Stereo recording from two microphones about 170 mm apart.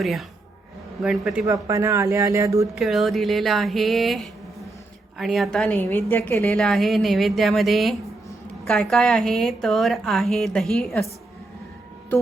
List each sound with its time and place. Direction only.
0.0 s a woman's voice: centre (ahead or behind)
1.5 s speech: 20° right (ahead or behind)
2.7 s a woman's voice: centre (ahead or behind)
6.6 s a woman's voice: centre (ahead or behind)